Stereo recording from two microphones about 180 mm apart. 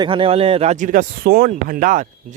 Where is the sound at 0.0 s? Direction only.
30° right (ahead or behind).